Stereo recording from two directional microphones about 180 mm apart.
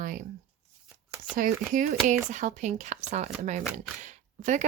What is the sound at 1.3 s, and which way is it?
Speech, 50° right (ahead or behind).